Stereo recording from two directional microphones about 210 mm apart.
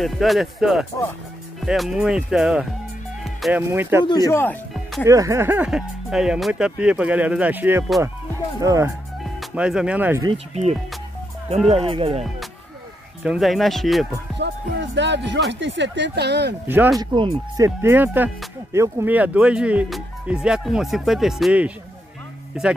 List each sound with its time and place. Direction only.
0.0 s speech: centre (ahead or behind)
3.3 s music: centre (ahead or behind)
3.6 s speech: 10° right (ahead or behind)
4.0 s speech: 20° left (ahead or behind)
5.0 s speech: 15° right (ahead or behind)
9.4 s speech: 5° right (ahead or behind)
10.2 s speech: 30° right (ahead or behind)
13.2 s speech: centre (ahead or behind)
14.4 s music: 55° right (ahead or behind)
16.6 s speech: 10° right (ahead or behind)
17.1 s speech: 25° right (ahead or behind)
17.6 s speech: 10° right (ahead or behind)